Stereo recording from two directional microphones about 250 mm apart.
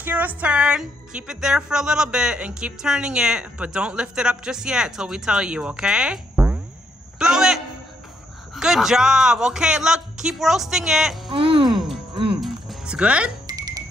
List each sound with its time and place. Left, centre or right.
0.0 s a woman's voice: centre
11.2 s a sound: right
12.4 s music: centre
13.5 s music: centre